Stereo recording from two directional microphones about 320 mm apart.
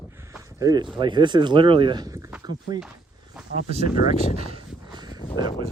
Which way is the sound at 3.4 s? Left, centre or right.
Centre.